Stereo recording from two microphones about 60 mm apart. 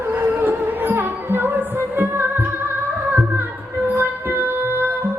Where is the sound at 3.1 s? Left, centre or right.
Right.